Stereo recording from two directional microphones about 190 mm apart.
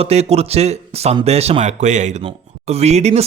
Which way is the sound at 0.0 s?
35° right (ahead or behind).